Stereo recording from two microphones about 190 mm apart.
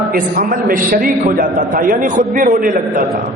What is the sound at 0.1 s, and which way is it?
A man's voice, 50° right (ahead or behind).